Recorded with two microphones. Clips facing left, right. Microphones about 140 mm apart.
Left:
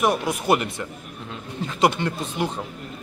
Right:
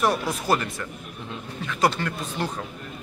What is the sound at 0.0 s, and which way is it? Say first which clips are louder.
A man's voice: left 2 dB; 15° left (ahead or behind).